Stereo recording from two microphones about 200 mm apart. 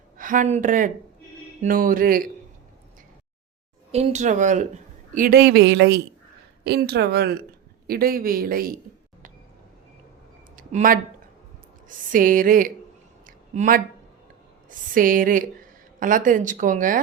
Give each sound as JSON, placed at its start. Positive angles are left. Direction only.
{"t": 0.2, "sound": "a woman's voice", "side_deg": -40}
{"t": 3.9, "sound": "a woman's voice", "side_deg": -35}
{"t": 10.6, "sound": "speech", "side_deg": -40}
{"t": 13.2, "sound": "a sound", "side_deg": -40}
{"t": 14.7, "sound": "a woman's voice", "side_deg": -45}